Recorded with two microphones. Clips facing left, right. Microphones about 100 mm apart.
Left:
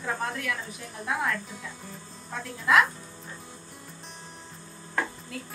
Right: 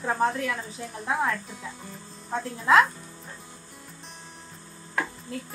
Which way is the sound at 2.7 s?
30° right (ahead or behind).